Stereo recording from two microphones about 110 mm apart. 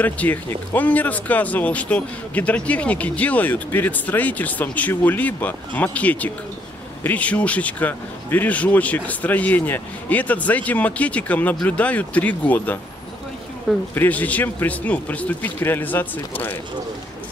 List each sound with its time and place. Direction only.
0.0 s speech: 15° left (ahead or behind)
13.9 s speech: 15° left (ahead or behind)